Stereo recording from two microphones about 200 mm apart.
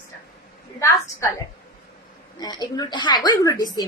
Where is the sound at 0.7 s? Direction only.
15° left (ahead or behind).